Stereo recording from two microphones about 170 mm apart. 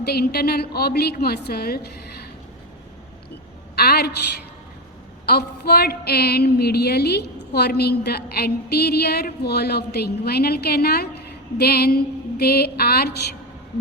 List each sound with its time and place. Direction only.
0.0 s a woman's voice: 70° left (ahead or behind)
3.8 s a woman's voice: 65° left (ahead or behind)
5.2 s a woman's voice: 70° left (ahead or behind)